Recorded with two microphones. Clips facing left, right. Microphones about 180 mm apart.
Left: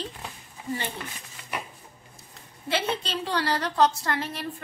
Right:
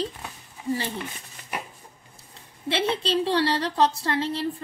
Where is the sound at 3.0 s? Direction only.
30° right (ahead or behind).